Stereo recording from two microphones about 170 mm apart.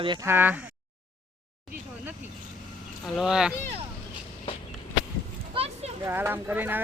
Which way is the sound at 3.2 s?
5° right (ahead or behind).